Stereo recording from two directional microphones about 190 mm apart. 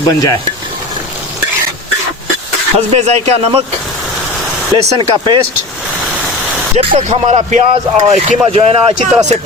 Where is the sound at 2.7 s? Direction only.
35° right (ahead or behind).